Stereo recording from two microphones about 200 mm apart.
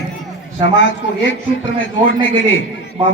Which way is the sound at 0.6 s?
70° left (ahead or behind).